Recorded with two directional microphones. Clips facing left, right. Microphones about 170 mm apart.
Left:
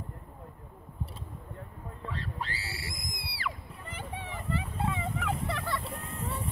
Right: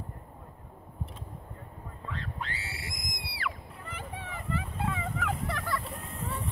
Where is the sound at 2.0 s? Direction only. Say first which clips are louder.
Left 1 dB; 35° left (ahead or behind).